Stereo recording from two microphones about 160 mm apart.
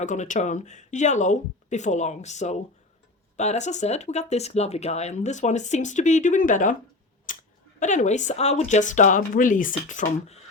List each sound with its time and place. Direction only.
0.0 s speech: 50° left (ahead or behind)
7.3 s a sound: 55° left (ahead or behind)
7.8 s speech: 50° left (ahead or behind)